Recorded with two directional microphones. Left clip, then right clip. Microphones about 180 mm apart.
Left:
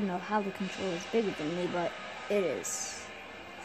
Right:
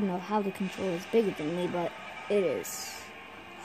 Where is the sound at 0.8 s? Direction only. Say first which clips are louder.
Right 4 dB; 5° left (ahead or behind).